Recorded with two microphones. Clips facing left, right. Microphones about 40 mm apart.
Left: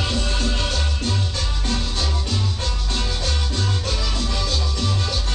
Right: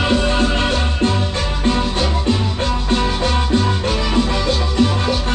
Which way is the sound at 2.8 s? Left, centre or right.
Right.